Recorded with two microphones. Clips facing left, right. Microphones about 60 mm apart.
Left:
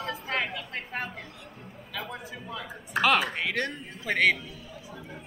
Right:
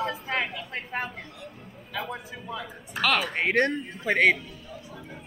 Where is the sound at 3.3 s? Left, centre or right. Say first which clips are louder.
Right 6 dB; right.